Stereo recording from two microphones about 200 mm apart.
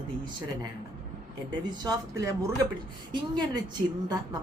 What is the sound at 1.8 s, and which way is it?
Speech, 15° right (ahead or behind).